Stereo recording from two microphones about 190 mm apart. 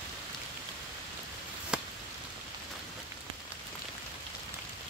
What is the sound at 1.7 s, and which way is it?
Chop, 5° right (ahead or behind).